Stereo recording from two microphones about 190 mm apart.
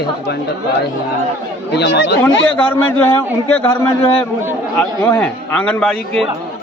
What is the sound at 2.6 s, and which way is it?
A man's voice, 10° left (ahead or behind).